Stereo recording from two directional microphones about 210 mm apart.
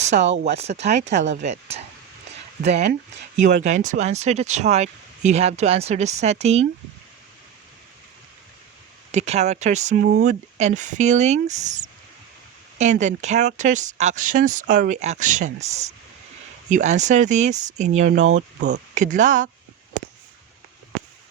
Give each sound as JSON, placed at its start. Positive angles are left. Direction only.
{"t": 0.0, "sound": "speech", "side_deg": -35}
{"t": 9.1, "sound": "speech", "side_deg": -30}
{"t": 12.8, "sound": "speech", "side_deg": -35}
{"t": 16.6, "sound": "speech", "side_deg": -35}